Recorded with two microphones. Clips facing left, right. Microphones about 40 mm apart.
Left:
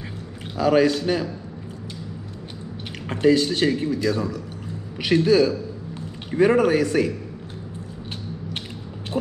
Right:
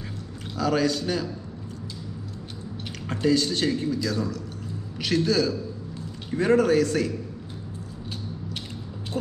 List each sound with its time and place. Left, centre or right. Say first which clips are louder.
0.6 s a man's voice: left 6 dB; left
3.1 s a man's voice: left 5 dB; left
9.1 s a sound: left 3 dB; centre